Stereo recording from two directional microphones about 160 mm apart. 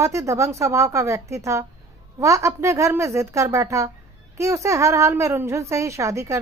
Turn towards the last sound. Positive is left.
turn(degrees=-20)  # may be behind; listen again after turning